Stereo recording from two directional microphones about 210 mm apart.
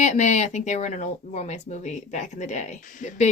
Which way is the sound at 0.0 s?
35° left (ahead or behind).